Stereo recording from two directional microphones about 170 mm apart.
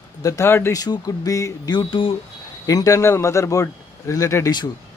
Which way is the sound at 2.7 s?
20° left (ahead or behind).